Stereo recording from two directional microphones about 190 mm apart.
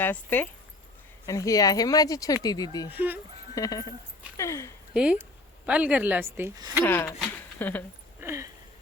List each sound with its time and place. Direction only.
0.0 s speech: 10° left (ahead or behind)
2.9 s speech: 10° right (ahead or behind)
3.5 s speech: 20° left (ahead or behind)
4.9 s speech: 5° right (ahead or behind)
6.8 s speech: 10° left (ahead or behind)
8.2 s a sound: 15° right (ahead or behind)